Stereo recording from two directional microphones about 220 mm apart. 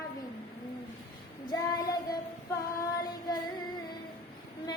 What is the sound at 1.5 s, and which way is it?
Child singing, 15° left (ahead or behind).